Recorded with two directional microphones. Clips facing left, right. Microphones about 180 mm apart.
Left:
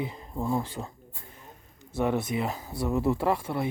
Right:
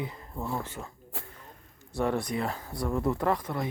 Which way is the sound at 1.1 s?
90° right.